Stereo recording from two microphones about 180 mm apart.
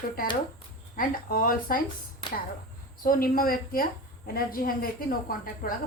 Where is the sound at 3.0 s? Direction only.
50° left (ahead or behind).